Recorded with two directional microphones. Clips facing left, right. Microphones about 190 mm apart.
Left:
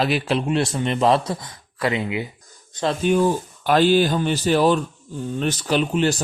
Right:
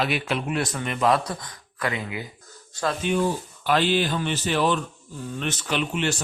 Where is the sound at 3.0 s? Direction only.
40° left (ahead or behind).